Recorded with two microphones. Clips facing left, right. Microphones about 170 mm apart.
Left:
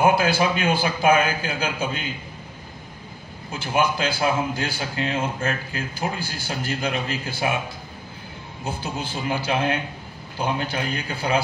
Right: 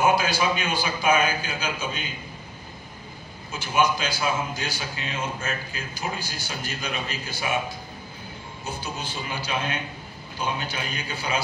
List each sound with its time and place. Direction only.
0.0 s speech: 55° left (ahead or behind)
3.6 s speech: 55° left (ahead or behind)
8.6 s speech: 55° left (ahead or behind)